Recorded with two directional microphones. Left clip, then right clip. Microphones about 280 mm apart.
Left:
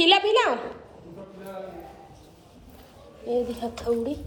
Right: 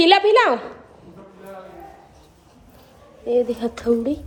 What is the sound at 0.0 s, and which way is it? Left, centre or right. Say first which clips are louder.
Speech: right 5 dB; centre.